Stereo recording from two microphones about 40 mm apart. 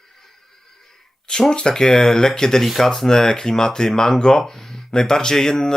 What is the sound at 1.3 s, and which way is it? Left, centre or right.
Speech, centre.